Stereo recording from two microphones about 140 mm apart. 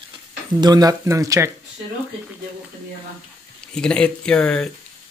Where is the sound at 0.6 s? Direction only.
25° right (ahead or behind).